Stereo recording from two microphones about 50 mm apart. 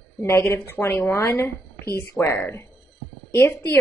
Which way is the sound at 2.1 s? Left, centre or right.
Left.